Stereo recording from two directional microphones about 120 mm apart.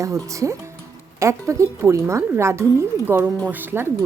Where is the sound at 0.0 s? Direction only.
25° right (ahead or behind).